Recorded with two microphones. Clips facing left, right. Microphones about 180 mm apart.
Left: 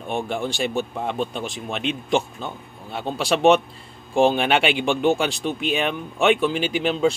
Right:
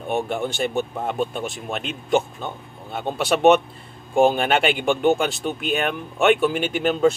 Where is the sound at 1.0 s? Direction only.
5° right (ahead or behind).